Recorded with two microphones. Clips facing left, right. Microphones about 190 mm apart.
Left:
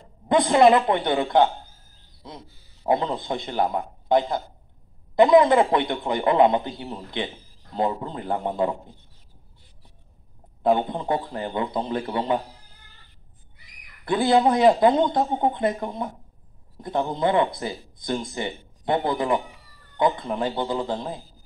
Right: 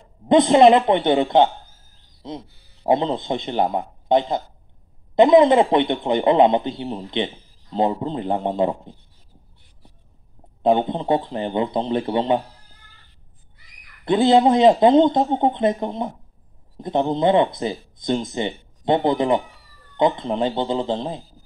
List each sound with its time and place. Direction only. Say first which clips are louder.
0.3 s speech: right 4 dB; 20° right (ahead or behind)
10.6 s speech: right 3 dB; 20° right (ahead or behind)
14.0 s a man's voice: right 4 dB; 20° right (ahead or behind)